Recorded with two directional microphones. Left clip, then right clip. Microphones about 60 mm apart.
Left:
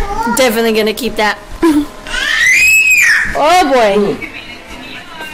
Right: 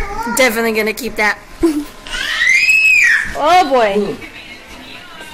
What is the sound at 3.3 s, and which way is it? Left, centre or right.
Speech, left.